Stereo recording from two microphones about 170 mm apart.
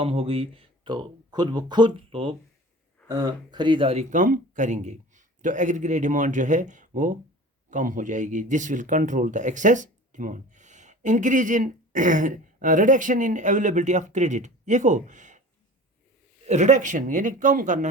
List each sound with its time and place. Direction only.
0.0 s speech: 35° right (ahead or behind)
16.5 s speech: 45° right (ahead or behind)